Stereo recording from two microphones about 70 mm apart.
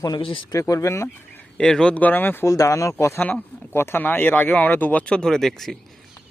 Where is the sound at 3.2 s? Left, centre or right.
Left.